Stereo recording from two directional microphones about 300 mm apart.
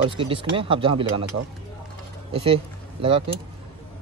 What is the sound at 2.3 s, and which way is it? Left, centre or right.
Speech, centre.